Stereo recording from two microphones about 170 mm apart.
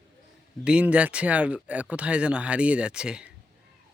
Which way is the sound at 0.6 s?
5° right (ahead or behind).